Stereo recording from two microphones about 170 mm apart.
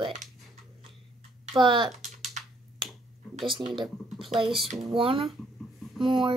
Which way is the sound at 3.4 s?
30° right (ahead or behind).